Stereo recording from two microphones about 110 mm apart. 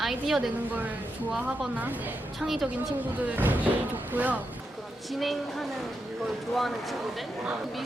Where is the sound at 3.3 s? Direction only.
15° right (ahead or behind).